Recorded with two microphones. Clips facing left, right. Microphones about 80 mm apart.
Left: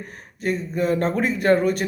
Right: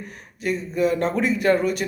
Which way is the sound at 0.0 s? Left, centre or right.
Left.